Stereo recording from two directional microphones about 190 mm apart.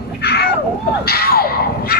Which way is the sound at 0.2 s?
55° left (ahead or behind).